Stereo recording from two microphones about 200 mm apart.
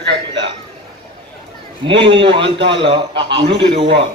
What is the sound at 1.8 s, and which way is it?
A man's voice, 25° right (ahead or behind).